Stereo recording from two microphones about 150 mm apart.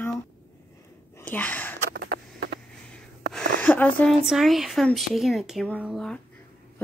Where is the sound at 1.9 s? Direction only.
90° right.